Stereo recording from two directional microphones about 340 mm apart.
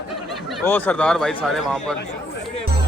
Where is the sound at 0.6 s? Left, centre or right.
Centre.